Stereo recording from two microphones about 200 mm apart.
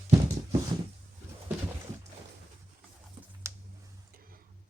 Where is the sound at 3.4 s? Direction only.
15° right (ahead or behind).